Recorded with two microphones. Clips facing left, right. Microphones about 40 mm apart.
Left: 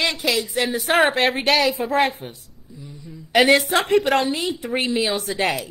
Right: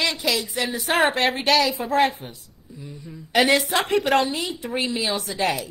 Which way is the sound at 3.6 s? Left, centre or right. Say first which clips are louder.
Left 3 dB; left.